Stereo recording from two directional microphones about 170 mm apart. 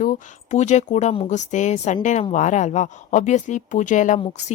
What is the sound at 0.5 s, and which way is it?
Speech, 45° left (ahead or behind).